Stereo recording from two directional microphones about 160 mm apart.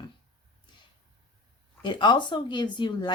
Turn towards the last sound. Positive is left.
turn(degrees=30)  # may be behind; listen again after turning